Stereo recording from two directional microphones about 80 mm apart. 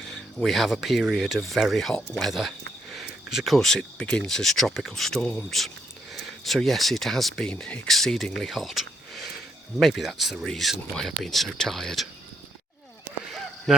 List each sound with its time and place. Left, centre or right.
0.4 s speech: centre
2.9 s a sound: centre
4.0 s speech: centre
5.2 s speech: centre
5.5 s speech: centre
7.5 s speech: centre
7.9 s speech: centre
13.2 s a sound: centre